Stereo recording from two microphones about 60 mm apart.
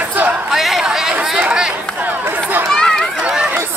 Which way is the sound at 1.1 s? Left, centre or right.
Centre.